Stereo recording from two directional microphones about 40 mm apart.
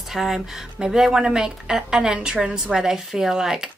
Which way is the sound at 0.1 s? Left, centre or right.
Centre.